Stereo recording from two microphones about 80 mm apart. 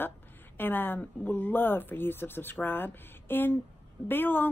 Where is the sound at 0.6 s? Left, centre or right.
Left.